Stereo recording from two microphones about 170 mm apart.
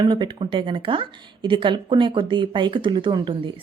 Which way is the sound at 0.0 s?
25° right (ahead or behind).